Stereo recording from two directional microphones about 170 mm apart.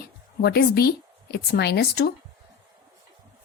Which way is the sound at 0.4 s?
65° left (ahead or behind).